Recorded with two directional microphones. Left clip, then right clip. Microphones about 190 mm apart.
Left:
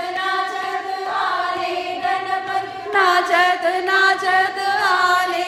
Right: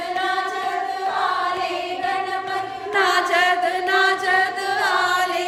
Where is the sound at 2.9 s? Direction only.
20° left (ahead or behind).